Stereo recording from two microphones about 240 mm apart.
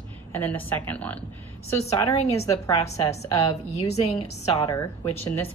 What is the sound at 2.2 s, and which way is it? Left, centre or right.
Speech, left.